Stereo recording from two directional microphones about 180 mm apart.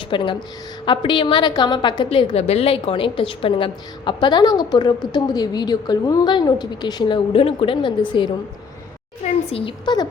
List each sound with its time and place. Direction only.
0.1 s a woman's voice: 25° left (ahead or behind)